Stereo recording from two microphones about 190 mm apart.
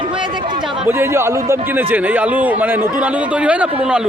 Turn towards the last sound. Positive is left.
turn(degrees=-5)  # may be behind; listen again after turning